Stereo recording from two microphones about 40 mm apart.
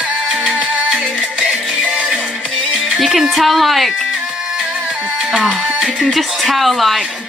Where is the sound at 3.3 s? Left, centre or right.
Centre.